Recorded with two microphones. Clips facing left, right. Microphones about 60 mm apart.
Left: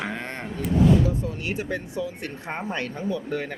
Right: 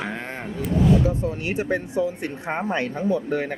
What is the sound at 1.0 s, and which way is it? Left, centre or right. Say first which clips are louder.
Speech: right 3 dB; right.